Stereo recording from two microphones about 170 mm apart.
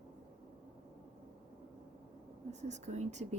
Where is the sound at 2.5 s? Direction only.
45° right (ahead or behind).